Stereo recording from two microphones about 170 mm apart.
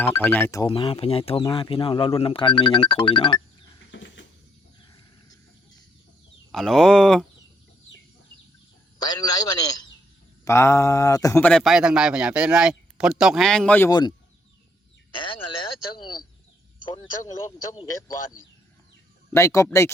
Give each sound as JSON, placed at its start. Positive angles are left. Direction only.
{"t": 0.0, "sound": "speech", "side_deg": 10}
{"t": 0.7, "sound": "speech", "side_deg": 30}
{"t": 3.9, "sound": "a sound", "side_deg": 90}
{"t": 6.5, "sound": "a man's voice", "side_deg": 0}
{"t": 9.0, "sound": "a man's voice", "side_deg": 25}
{"t": 19.3, "sound": "speech", "side_deg": 15}